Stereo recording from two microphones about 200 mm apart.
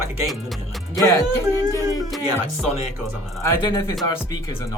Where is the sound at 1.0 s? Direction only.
15° left (ahead or behind).